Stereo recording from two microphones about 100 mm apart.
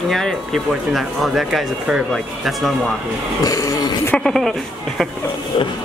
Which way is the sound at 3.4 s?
35° left (ahead or behind).